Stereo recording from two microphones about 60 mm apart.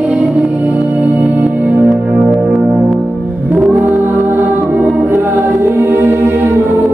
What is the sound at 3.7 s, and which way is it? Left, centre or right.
Music, right.